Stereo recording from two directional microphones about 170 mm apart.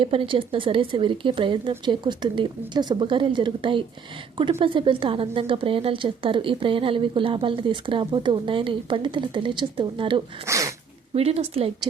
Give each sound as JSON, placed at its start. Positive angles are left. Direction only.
{"t": 0.0, "sound": "a woman's voice", "side_deg": -30}
{"t": 10.4, "sound": "speech", "side_deg": -20}
{"t": 11.1, "sound": "a woman's voice", "side_deg": -35}